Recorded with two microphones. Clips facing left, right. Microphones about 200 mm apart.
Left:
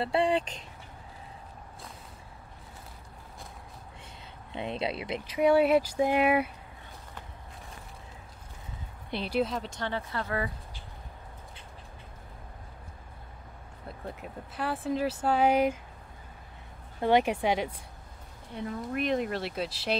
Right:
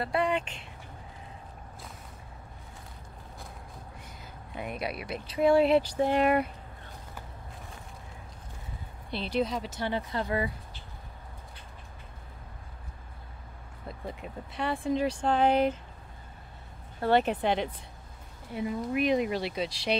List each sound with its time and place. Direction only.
0.0 s speech: 30° left (ahead or behind)
4.5 s speech: 25° left (ahead or behind)
5.5 s speech: 5° left (ahead or behind)
9.1 s speech: 10° left (ahead or behind); by 10.5 s 15° right (ahead or behind)
13.8 s speech: 5° left (ahead or behind)
17.0 s speech: 10° left (ahead or behind)
18.5 s speech: 5° right (ahead or behind)